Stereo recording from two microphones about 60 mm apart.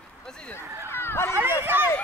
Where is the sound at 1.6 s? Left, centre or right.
Right.